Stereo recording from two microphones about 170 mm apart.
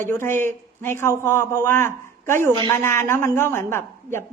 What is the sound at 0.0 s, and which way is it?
A man's voice, 15° left (ahead or behind).